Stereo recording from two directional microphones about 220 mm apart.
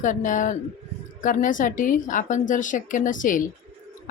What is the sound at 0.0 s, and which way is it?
A woman's voice, 35° left (ahead or behind).